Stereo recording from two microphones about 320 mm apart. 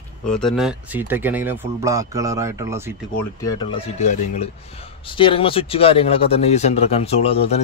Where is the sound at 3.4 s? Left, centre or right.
Centre.